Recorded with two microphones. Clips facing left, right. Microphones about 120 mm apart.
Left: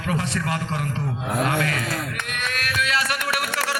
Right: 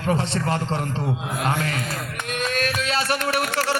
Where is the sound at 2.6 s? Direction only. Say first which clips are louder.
Left 1 dB; 30° right (ahead or behind).